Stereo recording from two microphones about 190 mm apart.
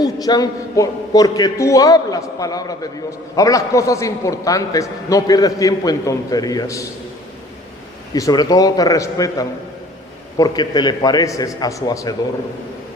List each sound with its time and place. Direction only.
0.0 s a man's voice: 20° left (ahead or behind)
8.1 s a man's voice: 20° left (ahead or behind)